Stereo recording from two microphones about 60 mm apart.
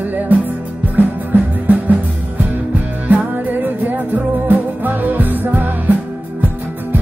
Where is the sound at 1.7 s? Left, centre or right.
Right.